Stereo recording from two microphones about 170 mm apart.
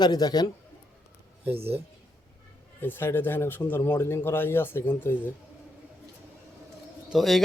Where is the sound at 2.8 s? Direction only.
10° left (ahead or behind).